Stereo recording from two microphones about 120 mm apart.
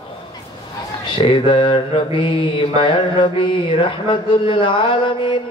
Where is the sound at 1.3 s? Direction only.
40° left (ahead or behind).